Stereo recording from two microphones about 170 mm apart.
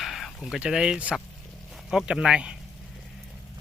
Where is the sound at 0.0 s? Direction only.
Centre (ahead or behind).